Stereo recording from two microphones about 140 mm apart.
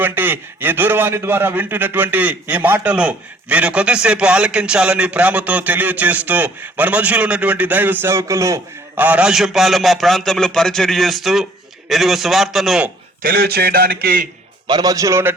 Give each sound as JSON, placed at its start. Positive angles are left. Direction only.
{"t": 0.0, "sound": "a man's voice", "side_deg": -15}
{"t": 13.2, "sound": "a man's voice", "side_deg": -90}
{"t": 14.7, "sound": "a man's voice", "side_deg": -30}